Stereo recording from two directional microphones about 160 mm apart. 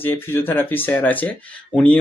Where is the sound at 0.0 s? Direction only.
15° left (ahead or behind).